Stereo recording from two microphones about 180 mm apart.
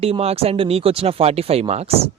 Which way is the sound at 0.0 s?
35° right (ahead or behind).